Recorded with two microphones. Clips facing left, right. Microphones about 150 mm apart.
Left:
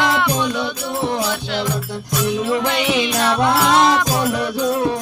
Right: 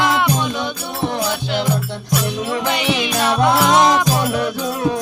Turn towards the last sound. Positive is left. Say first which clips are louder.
# right 1 dB
turn(degrees=-10)  # may be behind; listen again after turning